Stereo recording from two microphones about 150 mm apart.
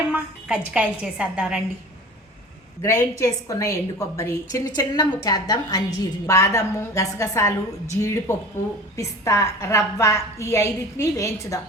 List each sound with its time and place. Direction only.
0.1 s a woman's voice: 5° right (ahead or behind)
2.8 s a woman's voice: 20° left (ahead or behind)